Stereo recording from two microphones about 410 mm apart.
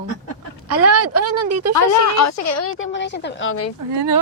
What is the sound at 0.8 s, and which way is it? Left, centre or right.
Speech, right.